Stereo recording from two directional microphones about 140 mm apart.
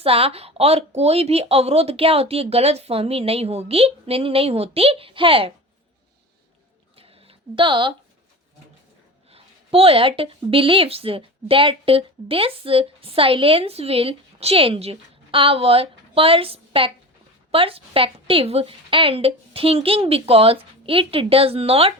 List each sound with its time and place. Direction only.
0.0 s speech: 45° right (ahead or behind)
6.9 s a sound: 45° right (ahead or behind)
9.3 s a woman's voice: 45° right (ahead or behind)